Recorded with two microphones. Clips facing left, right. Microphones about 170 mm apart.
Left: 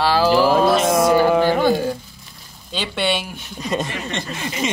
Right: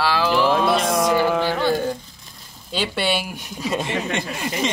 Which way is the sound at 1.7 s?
5° left (ahead or behind).